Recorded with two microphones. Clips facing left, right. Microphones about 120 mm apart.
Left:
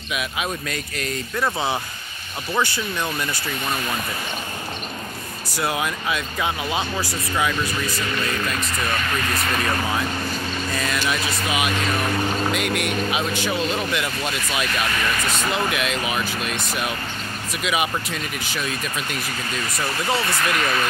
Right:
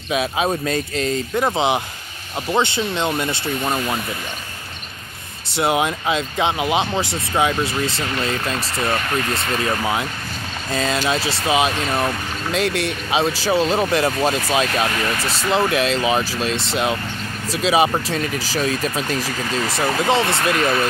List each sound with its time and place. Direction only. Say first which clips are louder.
0.1 s speech: right 7 dB; 30° right (ahead or behind)
5.6 s speech: right 6 dB; 25° right (ahead or behind)
19.2 s speech: right 5 dB; 85° right
20.1 s speech: right 3 dB; 25° right (ahead or behind)